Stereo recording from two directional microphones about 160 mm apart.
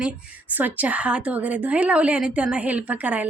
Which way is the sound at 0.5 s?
10° right (ahead or behind).